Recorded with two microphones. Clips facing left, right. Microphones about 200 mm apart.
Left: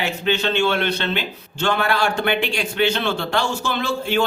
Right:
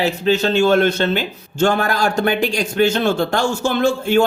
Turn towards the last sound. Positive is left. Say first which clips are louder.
# right 6 dB
turn(degrees=-45)  # may be behind; listen again after turning